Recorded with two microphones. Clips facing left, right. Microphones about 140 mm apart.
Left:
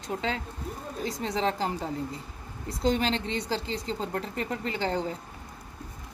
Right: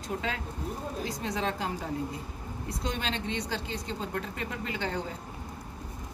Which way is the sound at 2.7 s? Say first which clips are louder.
Left 8 dB; 30° left (ahead or behind).